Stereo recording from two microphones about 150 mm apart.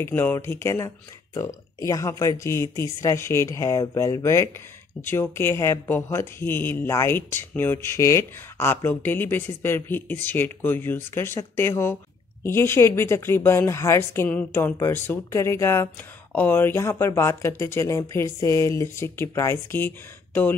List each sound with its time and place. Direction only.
0.0 s speech: 15° left (ahead or behind)